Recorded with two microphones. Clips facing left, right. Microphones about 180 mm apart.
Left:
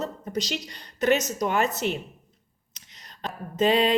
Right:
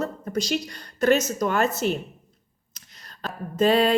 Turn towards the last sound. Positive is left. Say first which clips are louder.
# right 2 dB
turn(degrees=20)  # may be behind; listen again after turning